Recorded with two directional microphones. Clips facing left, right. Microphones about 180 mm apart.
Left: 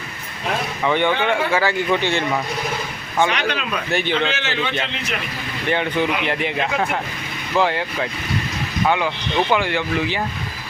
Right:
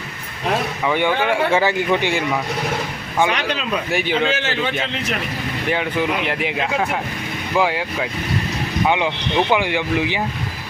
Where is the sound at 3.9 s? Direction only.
5° right (ahead or behind).